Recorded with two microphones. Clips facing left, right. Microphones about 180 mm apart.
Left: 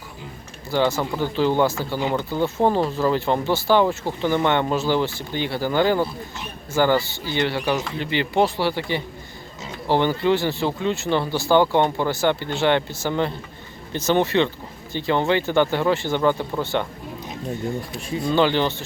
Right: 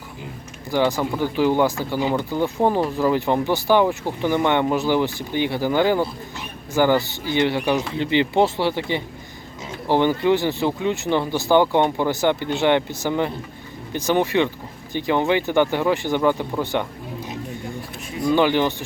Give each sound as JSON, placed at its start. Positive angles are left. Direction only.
{"t": 0.7, "sound": "speech", "side_deg": -15}
{"t": 18.3, "sound": "speech", "side_deg": -15}